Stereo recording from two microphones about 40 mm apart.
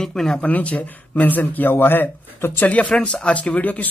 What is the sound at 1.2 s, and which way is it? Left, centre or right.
A man's voice, left.